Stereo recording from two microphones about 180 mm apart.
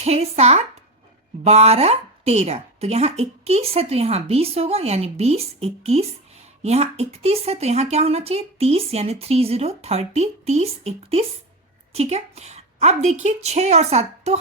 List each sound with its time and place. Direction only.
0.0 s speech: 35° right (ahead or behind)